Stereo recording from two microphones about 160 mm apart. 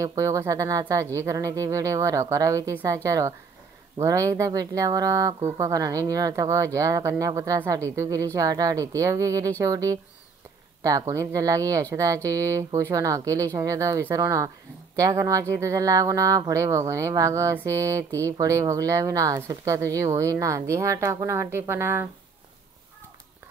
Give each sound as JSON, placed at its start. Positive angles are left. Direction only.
{"t": 0.0, "sound": "speech", "side_deg": -20}